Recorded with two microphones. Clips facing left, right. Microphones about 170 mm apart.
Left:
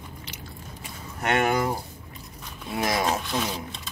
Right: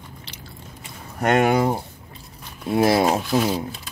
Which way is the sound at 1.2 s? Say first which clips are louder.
Right 5 dB; 40° right (ahead or behind).